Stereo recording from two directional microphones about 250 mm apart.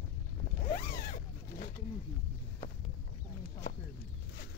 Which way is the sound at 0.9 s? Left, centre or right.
Left.